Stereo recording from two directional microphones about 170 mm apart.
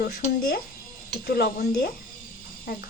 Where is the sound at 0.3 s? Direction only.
60° left (ahead or behind).